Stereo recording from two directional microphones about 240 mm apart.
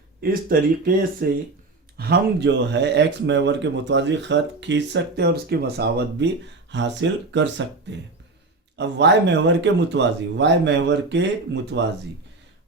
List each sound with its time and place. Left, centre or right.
0.2 s speech: right